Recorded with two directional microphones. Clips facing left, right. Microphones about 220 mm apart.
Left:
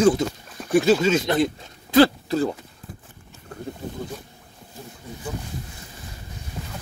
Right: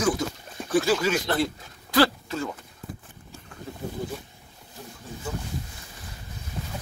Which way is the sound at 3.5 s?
35° left (ahead or behind).